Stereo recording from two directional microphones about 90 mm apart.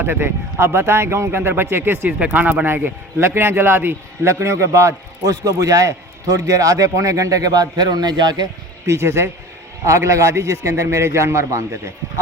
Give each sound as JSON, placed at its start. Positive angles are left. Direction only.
{"t": 0.0, "sound": "speech", "side_deg": -25}
{"t": 8.9, "sound": "speech", "side_deg": -30}